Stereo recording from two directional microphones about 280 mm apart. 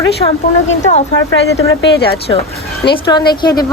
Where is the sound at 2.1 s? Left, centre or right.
Left.